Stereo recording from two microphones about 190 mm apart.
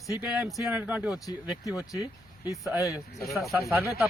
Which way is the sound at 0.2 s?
10° right (ahead or behind).